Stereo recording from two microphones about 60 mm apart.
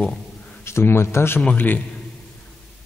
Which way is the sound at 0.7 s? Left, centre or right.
Left.